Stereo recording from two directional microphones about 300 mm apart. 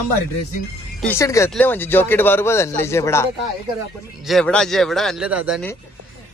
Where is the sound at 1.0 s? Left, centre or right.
Centre.